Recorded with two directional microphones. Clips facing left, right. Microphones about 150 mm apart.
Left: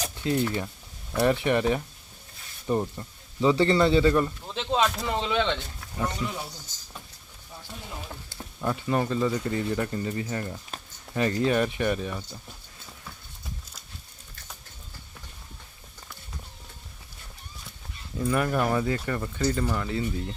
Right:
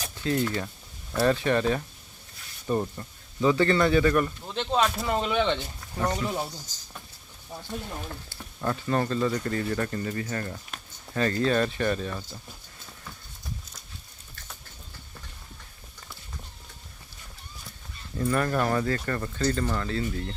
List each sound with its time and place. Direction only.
0.2 s speech: 20° left (ahead or behind)
4.4 s speech: centre (ahead or behind)
8.6 s speech: 10° left (ahead or behind)
18.2 s speech: 10° left (ahead or behind)